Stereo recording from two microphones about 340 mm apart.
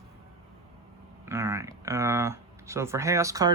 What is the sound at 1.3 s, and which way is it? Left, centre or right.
Speech, centre.